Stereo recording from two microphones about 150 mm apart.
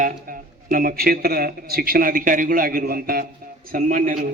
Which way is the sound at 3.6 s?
65° right (ahead or behind).